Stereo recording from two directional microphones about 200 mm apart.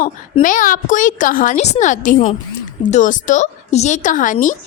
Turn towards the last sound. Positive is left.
turn(degrees=40)  # may be behind; listen again after turning